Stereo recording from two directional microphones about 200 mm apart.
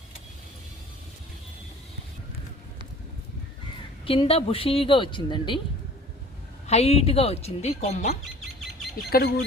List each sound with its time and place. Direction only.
4.0 s a woman's voice: 25° left (ahead or behind)
6.7 s a woman's voice: 30° left (ahead or behind)
9.0 s speech: 50° left (ahead or behind)